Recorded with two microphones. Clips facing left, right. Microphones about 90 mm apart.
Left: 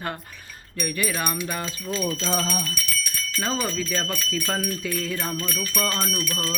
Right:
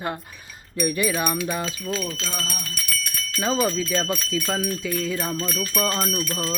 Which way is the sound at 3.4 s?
15° right (ahead or behind).